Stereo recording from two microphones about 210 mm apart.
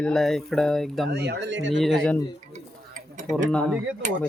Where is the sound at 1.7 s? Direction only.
Centre (ahead or behind).